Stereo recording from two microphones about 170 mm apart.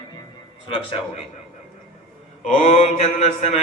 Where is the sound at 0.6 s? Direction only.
30° left (ahead or behind).